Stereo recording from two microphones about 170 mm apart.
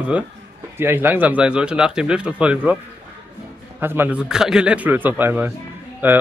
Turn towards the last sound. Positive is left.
turn(degrees=-10)  # may be behind; listen again after turning